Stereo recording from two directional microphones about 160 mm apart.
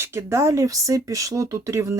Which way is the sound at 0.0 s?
15° right (ahead or behind).